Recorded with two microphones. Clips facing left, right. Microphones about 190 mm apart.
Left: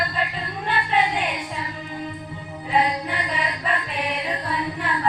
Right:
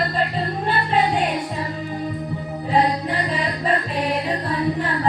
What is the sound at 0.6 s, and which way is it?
Music, 40° right (ahead or behind).